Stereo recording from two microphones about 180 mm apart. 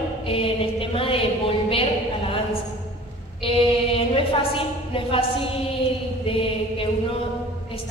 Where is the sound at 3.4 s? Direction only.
30° left (ahead or behind).